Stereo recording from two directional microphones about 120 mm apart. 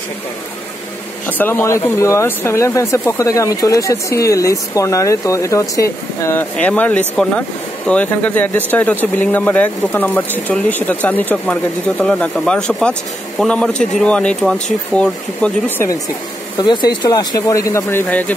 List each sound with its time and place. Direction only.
1.2 s speech: 20° left (ahead or behind)
6.5 s speech: 10° left (ahead or behind)
16.5 s speech: 35° left (ahead or behind); by 18.3 s 15° left (ahead or behind)